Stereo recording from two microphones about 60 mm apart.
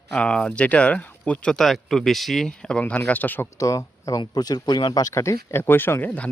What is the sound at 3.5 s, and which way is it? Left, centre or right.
Speech, left.